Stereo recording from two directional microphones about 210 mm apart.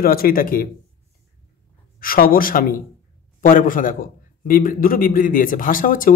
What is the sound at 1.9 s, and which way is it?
A man's voice, 45° left (ahead or behind).